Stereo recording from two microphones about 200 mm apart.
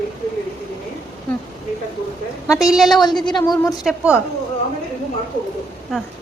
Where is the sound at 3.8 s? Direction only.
5° right (ahead or behind).